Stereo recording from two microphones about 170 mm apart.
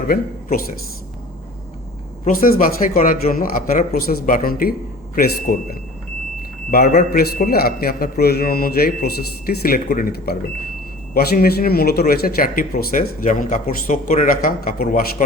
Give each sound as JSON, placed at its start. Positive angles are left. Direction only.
{"t": 0.1, "sound": "speech", "side_deg": 60}
{"t": 2.2, "sound": "speech", "side_deg": 55}